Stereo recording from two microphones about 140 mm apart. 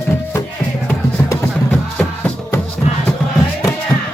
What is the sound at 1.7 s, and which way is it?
Music, 10° left (ahead or behind).